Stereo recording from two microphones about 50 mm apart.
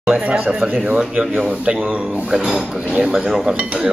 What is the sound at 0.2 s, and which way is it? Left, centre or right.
Speech, centre.